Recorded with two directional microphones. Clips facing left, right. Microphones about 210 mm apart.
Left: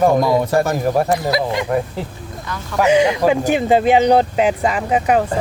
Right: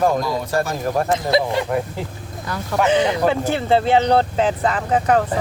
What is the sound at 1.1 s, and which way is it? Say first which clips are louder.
Speech: even; 25° right (ahead or behind).